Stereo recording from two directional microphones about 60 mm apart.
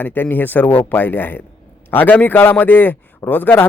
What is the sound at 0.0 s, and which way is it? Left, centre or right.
Speech, left.